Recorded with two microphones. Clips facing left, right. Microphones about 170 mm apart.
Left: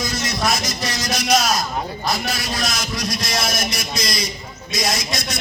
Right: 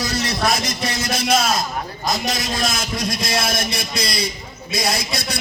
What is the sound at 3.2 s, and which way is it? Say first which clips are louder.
A man's voice: right 2 dB; 55° right (ahead or behind).